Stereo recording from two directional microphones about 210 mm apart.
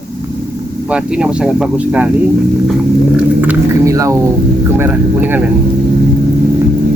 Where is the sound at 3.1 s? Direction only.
5° right (ahead or behind).